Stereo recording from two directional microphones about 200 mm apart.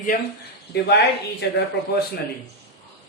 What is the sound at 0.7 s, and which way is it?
Speech, 55° left (ahead or behind).